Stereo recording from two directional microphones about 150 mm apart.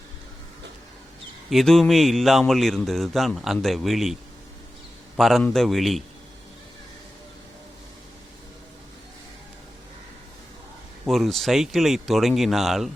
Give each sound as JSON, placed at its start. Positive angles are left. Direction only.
{"t": 1.5, "sound": "a man's voice", "side_deg": 0}
{"t": 11.0, "sound": "a man's voice", "side_deg": 0}